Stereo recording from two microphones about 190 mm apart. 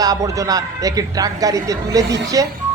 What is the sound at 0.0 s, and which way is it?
A man's voice, 20° right (ahead or behind).